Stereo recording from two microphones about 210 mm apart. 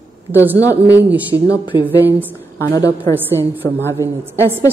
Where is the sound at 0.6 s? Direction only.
10° right (ahead or behind).